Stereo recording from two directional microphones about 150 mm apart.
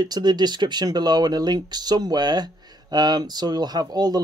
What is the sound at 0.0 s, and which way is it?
Speech, 25° right (ahead or behind).